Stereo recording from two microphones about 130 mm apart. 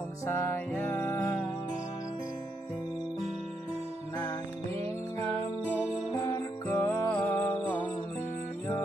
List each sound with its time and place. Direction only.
0.3 s music: 15° left (ahead or behind)
6.2 s music: 25° left (ahead or behind)